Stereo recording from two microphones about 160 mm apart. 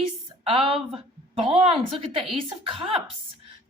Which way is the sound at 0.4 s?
35° right (ahead or behind).